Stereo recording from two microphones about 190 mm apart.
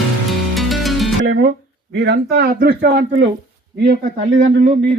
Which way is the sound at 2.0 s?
60° right (ahead or behind).